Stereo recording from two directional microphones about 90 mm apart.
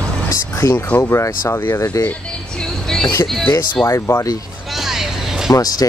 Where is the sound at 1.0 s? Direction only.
30° left (ahead or behind).